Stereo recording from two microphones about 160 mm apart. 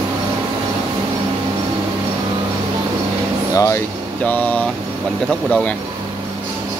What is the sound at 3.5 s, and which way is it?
Speech, 20° left (ahead or behind).